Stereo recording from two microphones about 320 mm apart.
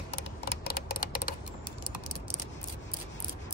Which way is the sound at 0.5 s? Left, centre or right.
Left.